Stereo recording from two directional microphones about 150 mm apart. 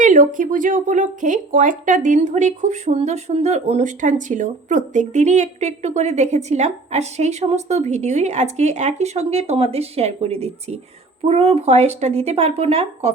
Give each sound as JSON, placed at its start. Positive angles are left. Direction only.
{"t": 0.0, "sound": "speech", "side_deg": -60}